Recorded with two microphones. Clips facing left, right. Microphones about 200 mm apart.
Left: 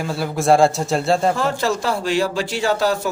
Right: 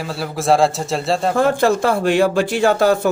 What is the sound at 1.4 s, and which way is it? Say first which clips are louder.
Speech: right 6 dB; 55° right (ahead or behind).